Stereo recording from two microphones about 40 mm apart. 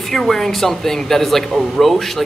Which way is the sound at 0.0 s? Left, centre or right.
Centre.